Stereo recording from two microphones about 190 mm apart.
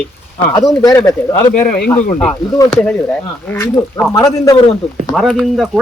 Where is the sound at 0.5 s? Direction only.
20° left (ahead or behind).